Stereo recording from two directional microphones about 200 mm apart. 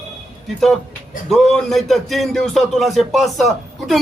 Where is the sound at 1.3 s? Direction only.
Centre (ahead or behind).